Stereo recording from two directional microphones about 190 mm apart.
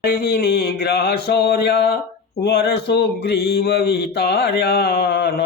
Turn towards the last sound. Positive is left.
turn(degrees=60)  # may be behind; listen again after turning